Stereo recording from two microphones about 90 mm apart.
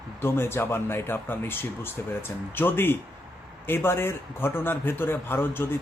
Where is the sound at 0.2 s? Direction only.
25° left (ahead or behind).